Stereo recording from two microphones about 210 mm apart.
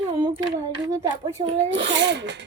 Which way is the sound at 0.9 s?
20° right (ahead or behind).